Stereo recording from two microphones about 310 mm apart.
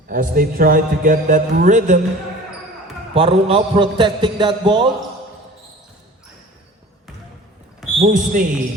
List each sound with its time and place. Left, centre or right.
0.1 s a man's voice: right
3.2 s a man's voice: centre
7.9 s a man's voice: right